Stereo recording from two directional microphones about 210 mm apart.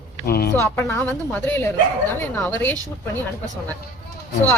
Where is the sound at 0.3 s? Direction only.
45° left (ahead or behind).